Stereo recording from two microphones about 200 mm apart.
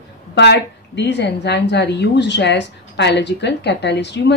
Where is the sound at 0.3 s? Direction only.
55° left (ahead or behind).